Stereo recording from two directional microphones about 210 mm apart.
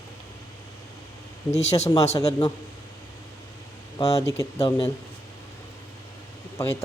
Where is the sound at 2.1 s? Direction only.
15° left (ahead or behind).